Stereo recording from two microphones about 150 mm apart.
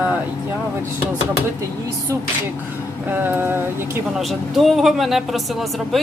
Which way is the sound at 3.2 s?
15° right (ahead or behind).